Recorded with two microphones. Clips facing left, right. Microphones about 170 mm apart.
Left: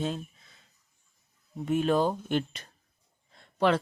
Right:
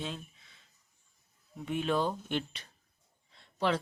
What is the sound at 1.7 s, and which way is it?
Speech, 45° left (ahead or behind).